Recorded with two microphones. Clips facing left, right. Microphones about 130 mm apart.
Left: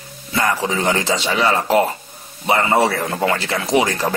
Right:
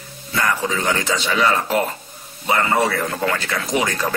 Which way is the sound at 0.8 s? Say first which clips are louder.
Left 3 dB; 25° left (ahead or behind).